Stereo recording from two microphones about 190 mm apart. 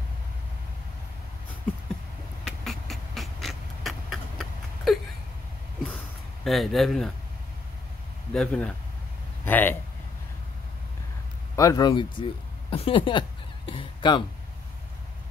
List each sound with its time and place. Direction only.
2.4 s a sound: centre (ahead or behind)
6.4 s speech: centre (ahead or behind)
8.3 s a man's voice: 5° left (ahead or behind)
11.5 s speech: 20° left (ahead or behind)
13.7 s honk: 25° left (ahead or behind)